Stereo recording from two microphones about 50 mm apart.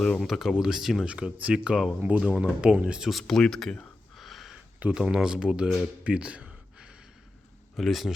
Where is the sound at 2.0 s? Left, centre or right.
Right.